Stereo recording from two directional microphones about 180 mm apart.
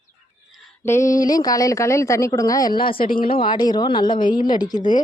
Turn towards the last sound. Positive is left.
turn(degrees=25)  # may be behind; listen again after turning